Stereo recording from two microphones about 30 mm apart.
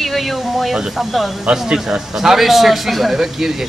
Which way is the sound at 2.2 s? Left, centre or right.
Centre.